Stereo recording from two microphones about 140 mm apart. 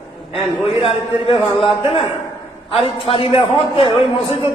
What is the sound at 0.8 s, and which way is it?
A man's voice, 40° left (ahead or behind).